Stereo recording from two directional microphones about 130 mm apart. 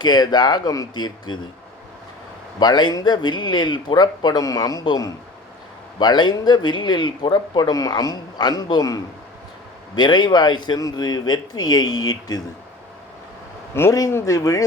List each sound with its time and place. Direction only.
0.0 s speech: 35° left (ahead or behind)
2.6 s speech: 35° left (ahead or behind)
10.0 s speech: 35° left (ahead or behind)
13.7 s speech: 20° left (ahead or behind)